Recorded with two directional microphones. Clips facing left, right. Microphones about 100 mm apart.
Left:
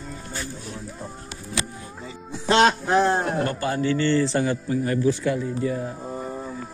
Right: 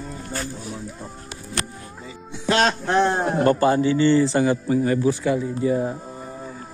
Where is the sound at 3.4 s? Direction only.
35° right (ahead or behind).